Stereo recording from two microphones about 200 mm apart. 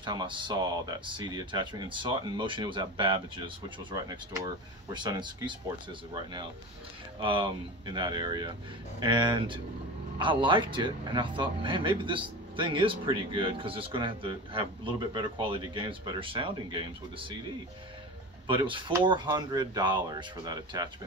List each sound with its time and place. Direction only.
0.0 s speech: 20° right (ahead or behind)
7.2 s speech: 25° right (ahead or behind)
18.5 s speech: 25° right (ahead or behind)